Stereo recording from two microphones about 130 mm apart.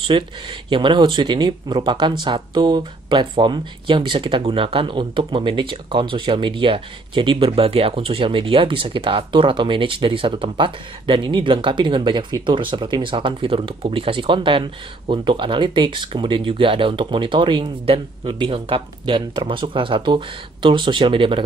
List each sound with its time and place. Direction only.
0.1 s speech: 40° right (ahead or behind)